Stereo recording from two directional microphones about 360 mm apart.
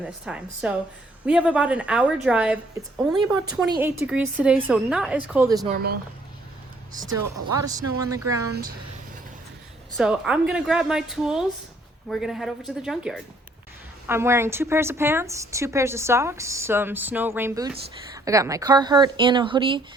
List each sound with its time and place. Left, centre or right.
0.0 s a woman's voice: centre
5.6 s speech: right
7.5 s a woman's voice: centre
8.5 s speech: right
10.0 s a woman's voice: centre